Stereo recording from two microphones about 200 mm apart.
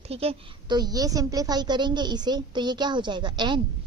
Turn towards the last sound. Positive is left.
turn(degrees=-25)  # may be behind; listen again after turning